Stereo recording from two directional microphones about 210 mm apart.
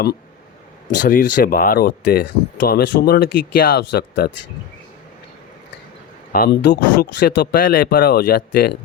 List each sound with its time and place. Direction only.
1.0 s speech: 40° left (ahead or behind)
6.3 s speech: 50° left (ahead or behind)
7.5 s speech: 40° left (ahead or behind)